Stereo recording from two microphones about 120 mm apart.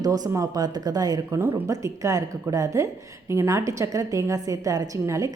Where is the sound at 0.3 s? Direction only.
30° right (ahead or behind).